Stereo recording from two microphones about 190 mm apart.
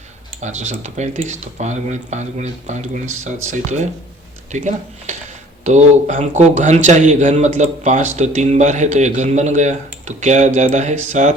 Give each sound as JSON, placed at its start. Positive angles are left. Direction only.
{"t": 0.4, "sound": "speech", "side_deg": -40}